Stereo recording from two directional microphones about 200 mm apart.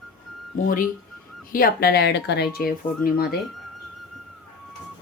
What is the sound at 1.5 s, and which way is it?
Speech, 45° left (ahead or behind).